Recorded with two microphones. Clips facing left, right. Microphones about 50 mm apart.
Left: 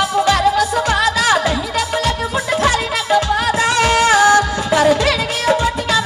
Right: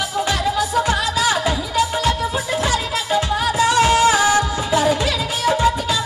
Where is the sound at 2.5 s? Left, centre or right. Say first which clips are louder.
Left 6 dB; left.